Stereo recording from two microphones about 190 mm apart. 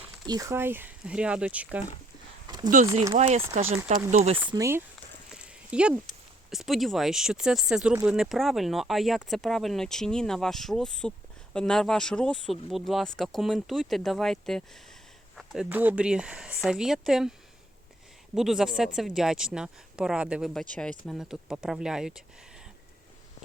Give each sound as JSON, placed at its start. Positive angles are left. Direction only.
{"t": 0.3, "sound": "speech", "side_deg": -15}
{"t": 3.2, "sound": "speech", "side_deg": -35}
{"t": 4.4, "sound": "speech", "side_deg": -15}
{"t": 5.3, "sound": "a sound", "side_deg": -5}
{"t": 6.5, "sound": "speech", "side_deg": 0}
{"t": 18.3, "sound": "speech", "side_deg": 0}